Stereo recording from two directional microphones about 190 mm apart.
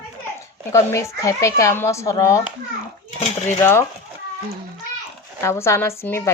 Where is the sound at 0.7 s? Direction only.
15° left (ahead or behind).